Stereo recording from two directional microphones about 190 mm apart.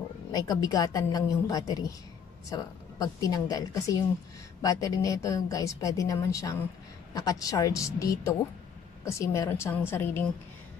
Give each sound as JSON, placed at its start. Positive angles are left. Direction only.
{"t": 0.3, "sound": "a woman's voice", "side_deg": 20}